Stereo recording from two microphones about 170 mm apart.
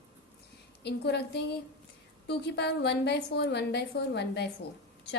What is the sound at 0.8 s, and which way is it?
A woman's voice, 80° left.